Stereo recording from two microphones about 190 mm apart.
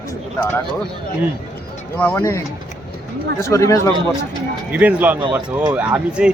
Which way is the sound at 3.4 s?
15° left (ahead or behind).